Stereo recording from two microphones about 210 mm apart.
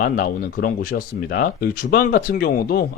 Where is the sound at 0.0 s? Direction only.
45° left (ahead or behind).